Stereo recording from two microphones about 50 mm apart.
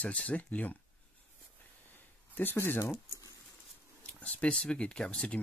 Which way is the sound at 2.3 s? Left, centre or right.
Left.